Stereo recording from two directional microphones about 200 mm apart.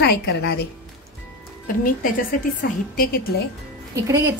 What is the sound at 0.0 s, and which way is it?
Speech, 55° left (ahead or behind).